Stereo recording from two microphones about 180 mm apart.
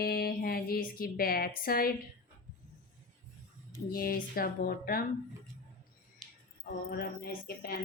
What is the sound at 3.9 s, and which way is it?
Speech, 55° left (ahead or behind).